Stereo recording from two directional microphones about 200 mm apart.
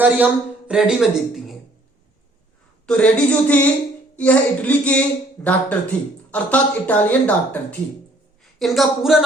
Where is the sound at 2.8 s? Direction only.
5° left (ahead or behind).